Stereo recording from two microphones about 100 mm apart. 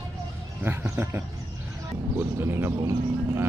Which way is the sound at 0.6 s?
20° right (ahead or behind).